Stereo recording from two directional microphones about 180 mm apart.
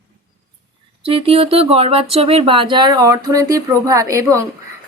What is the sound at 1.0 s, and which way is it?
Speech, 30° right (ahead or behind).